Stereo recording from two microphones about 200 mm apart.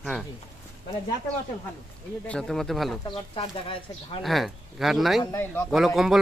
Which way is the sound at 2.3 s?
5° left (ahead or behind).